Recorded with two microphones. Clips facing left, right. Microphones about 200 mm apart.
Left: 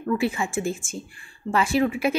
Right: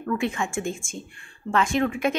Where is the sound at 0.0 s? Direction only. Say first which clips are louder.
Left 2 dB; 10° left (ahead or behind).